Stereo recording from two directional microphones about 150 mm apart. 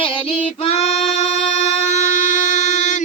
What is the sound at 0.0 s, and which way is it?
Female singing, 35° left (ahead or behind).